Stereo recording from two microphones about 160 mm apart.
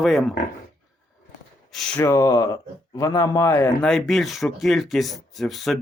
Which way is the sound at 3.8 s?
5° left (ahead or behind).